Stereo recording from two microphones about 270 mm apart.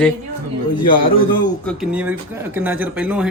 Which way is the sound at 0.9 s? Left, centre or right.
Left.